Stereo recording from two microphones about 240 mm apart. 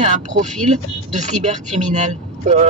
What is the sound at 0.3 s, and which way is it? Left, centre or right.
Speech, right.